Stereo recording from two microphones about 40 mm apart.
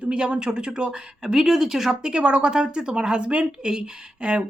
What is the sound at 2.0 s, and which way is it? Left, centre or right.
Speech, right.